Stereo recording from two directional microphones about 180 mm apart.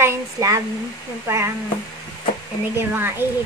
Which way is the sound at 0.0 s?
15° right (ahead or behind).